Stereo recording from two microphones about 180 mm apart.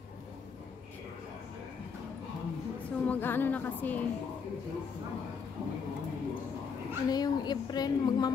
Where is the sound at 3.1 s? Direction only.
10° left (ahead or behind).